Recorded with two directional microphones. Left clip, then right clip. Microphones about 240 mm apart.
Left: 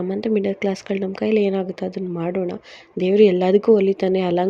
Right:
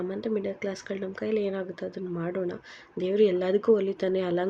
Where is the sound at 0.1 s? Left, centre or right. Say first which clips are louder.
Left 9 dB; left.